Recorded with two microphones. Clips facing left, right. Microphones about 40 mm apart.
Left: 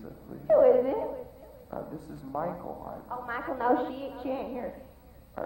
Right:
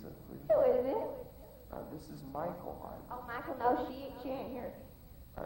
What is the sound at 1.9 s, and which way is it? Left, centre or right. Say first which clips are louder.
Speech: left 6 dB; left.